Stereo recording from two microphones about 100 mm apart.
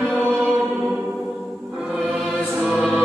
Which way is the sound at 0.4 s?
Centre (ahead or behind).